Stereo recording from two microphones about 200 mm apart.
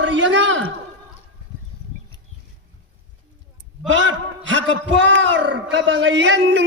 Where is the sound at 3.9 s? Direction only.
70° right (ahead or behind).